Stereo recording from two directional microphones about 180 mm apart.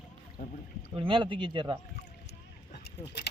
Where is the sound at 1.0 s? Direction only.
25° right (ahead or behind).